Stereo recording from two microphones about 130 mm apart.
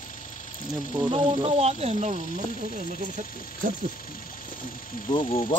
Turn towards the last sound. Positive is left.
turn(degrees=45)  # may be behind; listen again after turning